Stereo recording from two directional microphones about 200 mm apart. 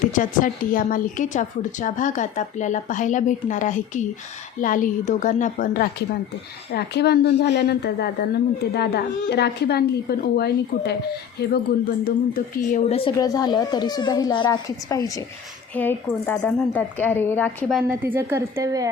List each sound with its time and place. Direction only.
0.0 s a woman's voice: 40° left (ahead or behind)
12.0 s a woman's voice: 45° left (ahead or behind)
13.1 s a woman's voice: 20° left (ahead or behind); by 17.9 s centre (ahead or behind)
18.0 s a woman's voice: 10° right (ahead or behind)